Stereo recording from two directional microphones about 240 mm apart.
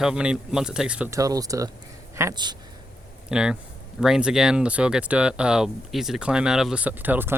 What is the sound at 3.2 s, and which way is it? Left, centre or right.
Speech, centre.